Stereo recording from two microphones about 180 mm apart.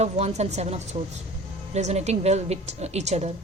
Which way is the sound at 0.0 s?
40° right (ahead or behind).